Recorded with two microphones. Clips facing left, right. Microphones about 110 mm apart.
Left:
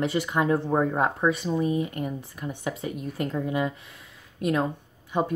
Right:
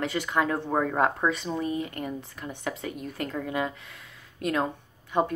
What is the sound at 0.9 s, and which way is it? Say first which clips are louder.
Speech: left 1 dB; 10° left (ahead or behind).